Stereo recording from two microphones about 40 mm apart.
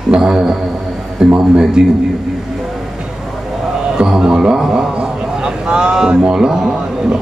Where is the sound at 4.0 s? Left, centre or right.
Centre.